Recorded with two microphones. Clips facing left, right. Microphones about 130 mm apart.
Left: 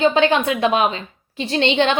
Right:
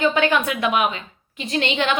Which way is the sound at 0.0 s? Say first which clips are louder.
Left 3 dB; 25° left (ahead or behind).